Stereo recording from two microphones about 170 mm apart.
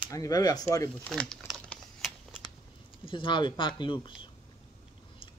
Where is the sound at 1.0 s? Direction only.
Centre (ahead or behind).